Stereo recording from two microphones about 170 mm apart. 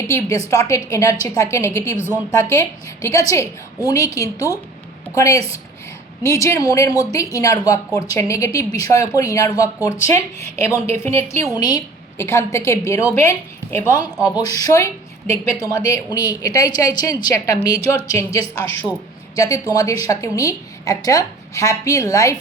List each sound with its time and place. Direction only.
0.1 s a woman's voice: 15° left (ahead or behind)
19.7 s speech: 20° left (ahead or behind)